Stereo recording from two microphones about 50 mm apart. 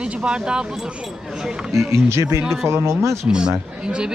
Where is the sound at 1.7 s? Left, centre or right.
Right.